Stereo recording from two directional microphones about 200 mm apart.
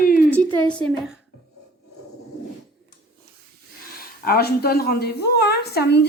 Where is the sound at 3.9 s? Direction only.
50° left (ahead or behind).